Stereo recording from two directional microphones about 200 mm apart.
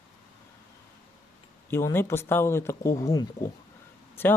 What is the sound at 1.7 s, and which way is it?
Speech, 10° left (ahead or behind).